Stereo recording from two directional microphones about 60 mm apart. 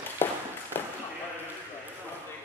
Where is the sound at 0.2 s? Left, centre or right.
Left.